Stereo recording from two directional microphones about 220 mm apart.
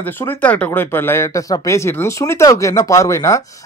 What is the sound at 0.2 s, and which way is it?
Speech, 10° left (ahead or behind).